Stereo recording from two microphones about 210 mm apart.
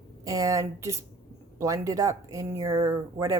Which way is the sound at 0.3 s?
15° right (ahead or behind).